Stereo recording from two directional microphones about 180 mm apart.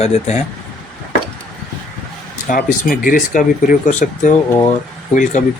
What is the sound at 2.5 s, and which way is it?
Speech, 50° left (ahead or behind).